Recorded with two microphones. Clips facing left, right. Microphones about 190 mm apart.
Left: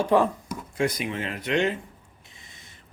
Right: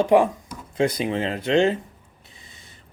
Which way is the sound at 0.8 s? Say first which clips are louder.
Right 5 dB; 25° right (ahead or behind).